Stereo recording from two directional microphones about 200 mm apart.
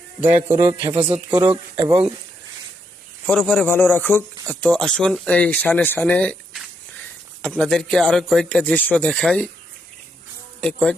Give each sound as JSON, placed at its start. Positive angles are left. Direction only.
{"t": 0.2, "sound": "a man's voice", "side_deg": -10}
{"t": 3.2, "sound": "speech", "side_deg": 5}
{"t": 7.6, "sound": "speech", "side_deg": 0}
{"t": 10.6, "sound": "speech", "side_deg": 5}